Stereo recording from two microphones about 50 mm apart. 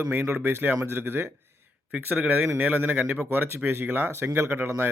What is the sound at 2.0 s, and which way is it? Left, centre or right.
A man's voice, right.